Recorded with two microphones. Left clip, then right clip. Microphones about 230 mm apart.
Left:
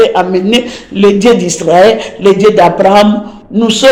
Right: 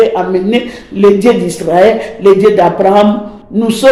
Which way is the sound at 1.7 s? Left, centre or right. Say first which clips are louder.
Left 2 dB; left.